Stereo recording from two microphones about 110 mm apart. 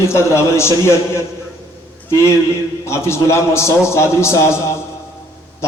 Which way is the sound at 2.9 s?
25° left (ahead or behind).